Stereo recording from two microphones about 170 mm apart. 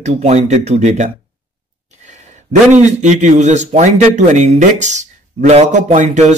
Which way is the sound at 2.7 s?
45° right (ahead or behind).